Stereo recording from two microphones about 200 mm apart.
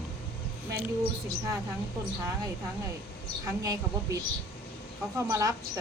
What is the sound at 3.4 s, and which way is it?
Speech, 15° right (ahead or behind).